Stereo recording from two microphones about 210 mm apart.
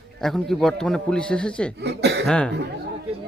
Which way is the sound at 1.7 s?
50° right (ahead or behind).